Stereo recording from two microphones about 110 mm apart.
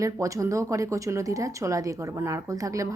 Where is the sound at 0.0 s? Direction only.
30° right (ahead or behind).